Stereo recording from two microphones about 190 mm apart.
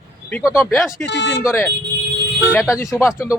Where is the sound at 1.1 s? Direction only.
65° left (ahead or behind).